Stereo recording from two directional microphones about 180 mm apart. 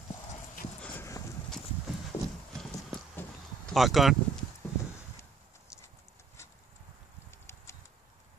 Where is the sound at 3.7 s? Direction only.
Centre (ahead or behind).